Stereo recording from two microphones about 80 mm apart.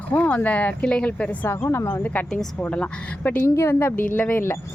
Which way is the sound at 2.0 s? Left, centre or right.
Left.